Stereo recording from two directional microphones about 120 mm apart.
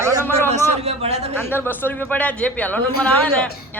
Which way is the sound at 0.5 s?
60° right (ahead or behind).